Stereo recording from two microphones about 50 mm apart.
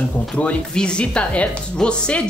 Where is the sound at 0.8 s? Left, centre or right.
Centre.